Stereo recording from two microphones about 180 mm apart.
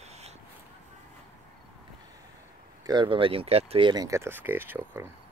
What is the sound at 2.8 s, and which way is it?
Speech, 25° right (ahead or behind).